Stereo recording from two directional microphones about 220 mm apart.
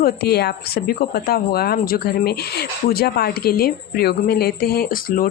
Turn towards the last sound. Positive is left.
turn(degrees=40)  # may be behind; listen again after turning